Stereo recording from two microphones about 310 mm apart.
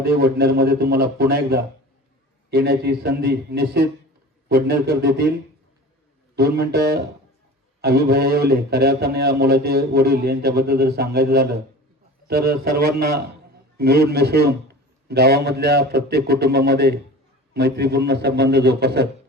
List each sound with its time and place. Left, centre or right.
0.0 s a man's voice: right
6.3 s a man's voice: right